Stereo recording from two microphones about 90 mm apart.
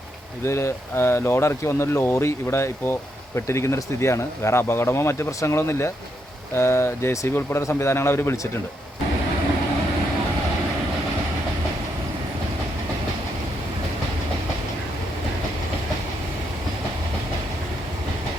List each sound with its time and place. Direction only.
0.4 s speech: 30° left (ahead or behind)